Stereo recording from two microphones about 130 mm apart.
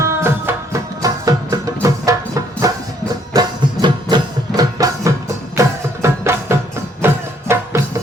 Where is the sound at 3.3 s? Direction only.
35° right (ahead or behind).